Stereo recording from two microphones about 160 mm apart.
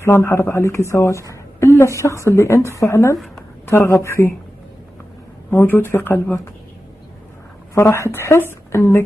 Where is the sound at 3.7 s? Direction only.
15° left (ahead or behind).